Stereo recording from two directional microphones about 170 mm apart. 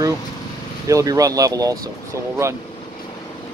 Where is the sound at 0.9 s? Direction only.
20° right (ahead or behind).